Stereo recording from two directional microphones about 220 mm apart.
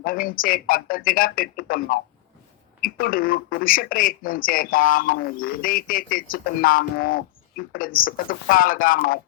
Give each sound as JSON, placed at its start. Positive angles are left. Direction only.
{"t": 0.0, "sound": "speech", "side_deg": 40}